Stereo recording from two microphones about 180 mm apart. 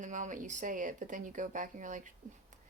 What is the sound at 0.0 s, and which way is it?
A woman's voice, 45° right (ahead or behind).